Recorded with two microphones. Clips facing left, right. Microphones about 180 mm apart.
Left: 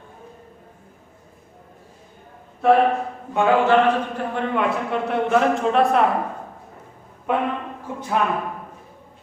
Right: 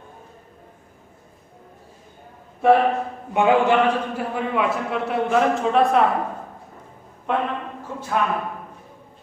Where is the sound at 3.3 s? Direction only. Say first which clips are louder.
Right 1 dB; 15° right (ahead or behind).